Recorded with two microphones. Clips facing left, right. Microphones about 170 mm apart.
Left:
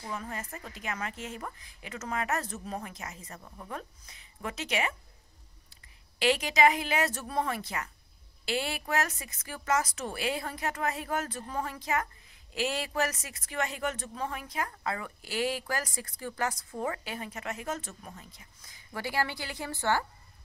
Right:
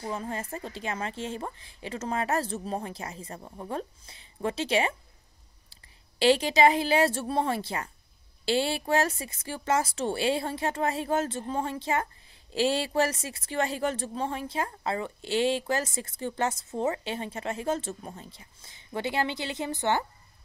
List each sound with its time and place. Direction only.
0.0 s a woman's voice: 30° right (ahead or behind)